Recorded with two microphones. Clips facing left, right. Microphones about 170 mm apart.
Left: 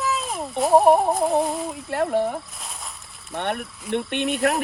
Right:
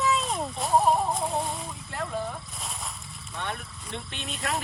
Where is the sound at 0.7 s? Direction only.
70° left (ahead or behind).